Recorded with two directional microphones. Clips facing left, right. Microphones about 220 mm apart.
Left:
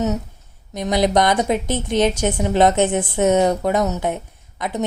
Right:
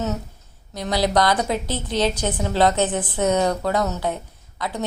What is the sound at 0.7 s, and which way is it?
A woman's voice, 20° left (ahead or behind).